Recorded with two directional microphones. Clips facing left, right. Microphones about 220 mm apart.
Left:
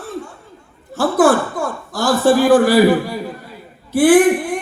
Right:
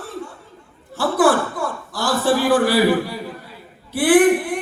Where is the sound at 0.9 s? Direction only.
45° left (ahead or behind).